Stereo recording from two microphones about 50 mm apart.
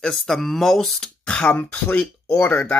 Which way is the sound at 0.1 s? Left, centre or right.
Centre.